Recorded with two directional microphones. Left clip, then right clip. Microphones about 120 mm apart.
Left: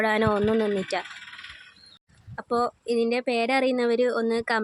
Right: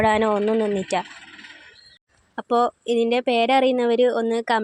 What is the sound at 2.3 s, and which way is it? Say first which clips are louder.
Speech: right 5 dB; 25° right (ahead or behind).